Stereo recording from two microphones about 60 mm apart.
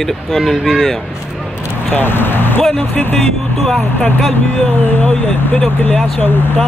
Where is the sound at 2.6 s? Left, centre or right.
Centre.